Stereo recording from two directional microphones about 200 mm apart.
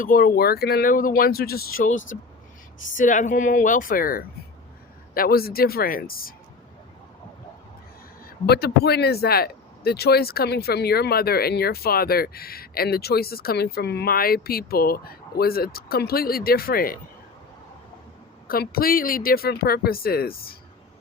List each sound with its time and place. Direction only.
0.0 s speech: 45° left (ahead or behind)
8.2 s speech: 50° left (ahead or behind)
18.4 s speech: 50° left (ahead or behind)